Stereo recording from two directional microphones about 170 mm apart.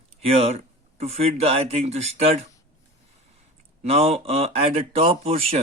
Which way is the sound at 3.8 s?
35° right (ahead or behind).